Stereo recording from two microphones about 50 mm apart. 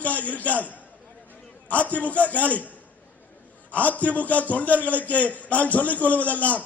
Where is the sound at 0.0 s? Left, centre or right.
Left.